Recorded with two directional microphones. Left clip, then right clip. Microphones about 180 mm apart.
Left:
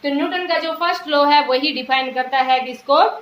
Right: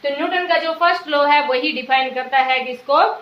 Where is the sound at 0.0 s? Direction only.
30° left (ahead or behind).